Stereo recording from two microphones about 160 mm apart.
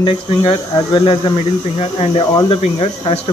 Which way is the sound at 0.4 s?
25° left (ahead or behind).